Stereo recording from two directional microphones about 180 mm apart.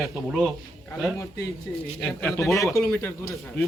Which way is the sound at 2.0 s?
10° left (ahead or behind).